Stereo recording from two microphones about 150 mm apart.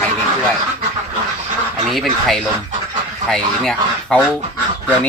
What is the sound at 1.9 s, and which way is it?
Speech, centre (ahead or behind).